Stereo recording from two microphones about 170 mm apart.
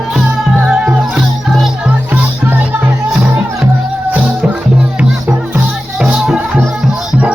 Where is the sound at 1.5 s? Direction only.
Centre (ahead or behind).